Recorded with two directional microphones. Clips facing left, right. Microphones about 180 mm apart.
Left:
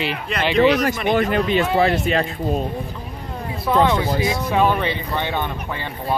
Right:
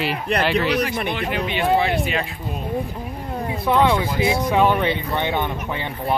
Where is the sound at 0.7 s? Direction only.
45° left (ahead or behind).